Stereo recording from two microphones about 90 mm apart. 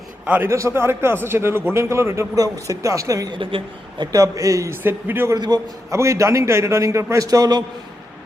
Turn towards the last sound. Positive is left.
turn(degrees=-45)  # may be behind; listen again after turning